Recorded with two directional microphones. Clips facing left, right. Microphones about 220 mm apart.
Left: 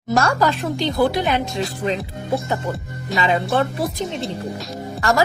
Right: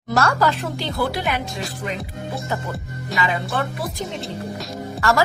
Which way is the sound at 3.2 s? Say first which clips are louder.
Left 5 dB; 25° left (ahead or behind).